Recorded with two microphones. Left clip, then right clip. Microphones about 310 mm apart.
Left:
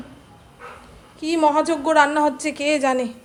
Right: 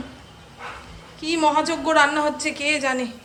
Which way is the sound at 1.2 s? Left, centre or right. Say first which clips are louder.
Left 2 dB; centre.